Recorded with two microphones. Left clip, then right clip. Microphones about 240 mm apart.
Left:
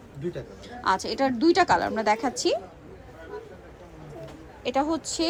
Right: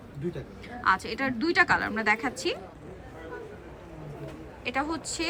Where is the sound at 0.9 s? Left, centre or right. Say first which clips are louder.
Left 2 dB; centre.